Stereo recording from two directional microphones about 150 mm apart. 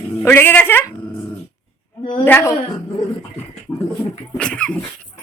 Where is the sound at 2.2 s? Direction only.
15° left (ahead or behind).